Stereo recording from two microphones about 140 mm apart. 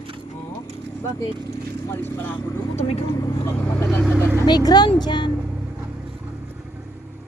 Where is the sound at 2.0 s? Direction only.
15° left (ahead or behind).